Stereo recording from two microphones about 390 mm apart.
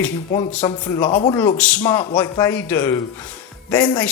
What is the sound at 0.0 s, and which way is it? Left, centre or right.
A man's voice, centre.